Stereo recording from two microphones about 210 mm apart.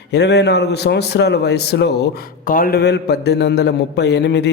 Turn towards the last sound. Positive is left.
turn(degrees=55)  # may be behind; listen again after turning